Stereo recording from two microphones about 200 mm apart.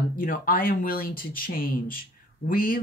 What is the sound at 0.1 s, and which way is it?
Speech, 45° left (ahead or behind).